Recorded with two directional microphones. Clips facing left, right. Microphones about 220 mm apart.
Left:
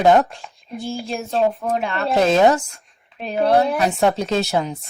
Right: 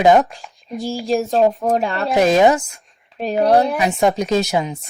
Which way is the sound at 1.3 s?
40° right (ahead or behind).